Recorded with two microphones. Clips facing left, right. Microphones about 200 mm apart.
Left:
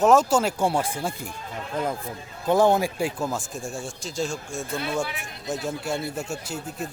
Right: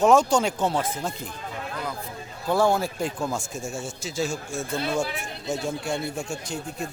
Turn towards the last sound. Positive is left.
turn(degrees=40)  # may be behind; listen again after turning